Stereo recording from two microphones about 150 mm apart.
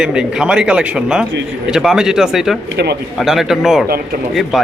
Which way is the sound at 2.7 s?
90° right.